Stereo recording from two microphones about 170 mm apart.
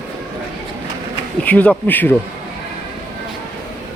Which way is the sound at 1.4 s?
10° left (ahead or behind).